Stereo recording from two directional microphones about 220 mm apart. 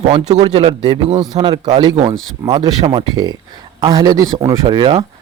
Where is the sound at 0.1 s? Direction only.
30° right (ahead or behind).